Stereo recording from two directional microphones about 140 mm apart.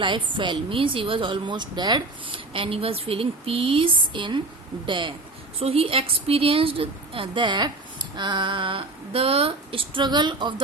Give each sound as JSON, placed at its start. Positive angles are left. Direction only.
{"t": 0.0, "sound": "a woman's voice", "side_deg": -35}